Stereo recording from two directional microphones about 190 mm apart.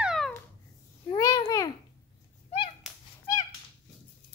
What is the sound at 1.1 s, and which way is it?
Babbling, 20° left (ahead or behind).